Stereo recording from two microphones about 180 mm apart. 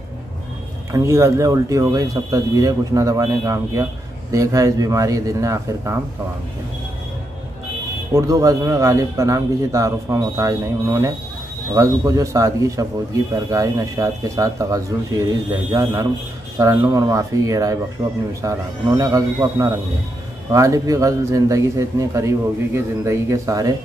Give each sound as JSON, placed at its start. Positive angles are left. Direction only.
{"t": 0.9, "sound": "a man's voice", "side_deg": -15}
{"t": 8.1, "sound": "a man's voice", "side_deg": -15}